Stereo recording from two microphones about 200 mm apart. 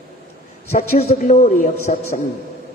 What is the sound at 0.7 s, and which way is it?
A man's voice, 35° left (ahead or behind).